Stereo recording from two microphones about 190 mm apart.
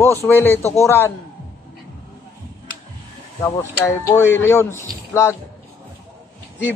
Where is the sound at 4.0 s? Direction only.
15° left (ahead or behind).